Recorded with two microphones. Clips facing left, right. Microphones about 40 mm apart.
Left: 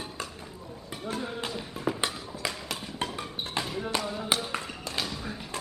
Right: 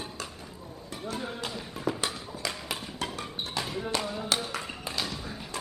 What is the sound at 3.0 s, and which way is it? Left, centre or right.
Music, left.